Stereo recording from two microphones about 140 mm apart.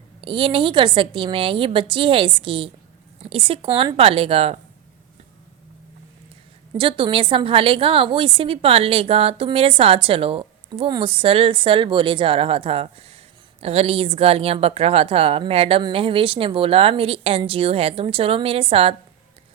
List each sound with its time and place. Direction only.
0.2 s a woman's voice: 40° right (ahead or behind)
6.7 s a woman's voice: 35° right (ahead or behind)